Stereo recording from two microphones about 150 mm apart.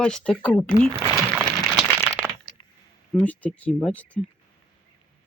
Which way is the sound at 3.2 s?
10° left (ahead or behind).